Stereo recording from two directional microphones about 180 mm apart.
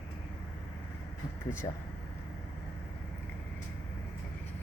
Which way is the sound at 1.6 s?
25° left (ahead or behind).